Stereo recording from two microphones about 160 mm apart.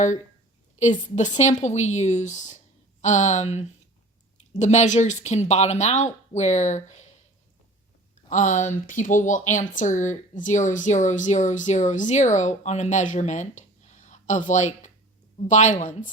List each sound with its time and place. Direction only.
0.8 s speech: 50° left (ahead or behind)
8.3 s speech: 50° left (ahead or behind)